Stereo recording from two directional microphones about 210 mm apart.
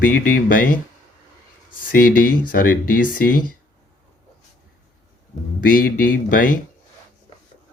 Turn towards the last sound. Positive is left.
turn(degrees=40)  # may be behind; listen again after turning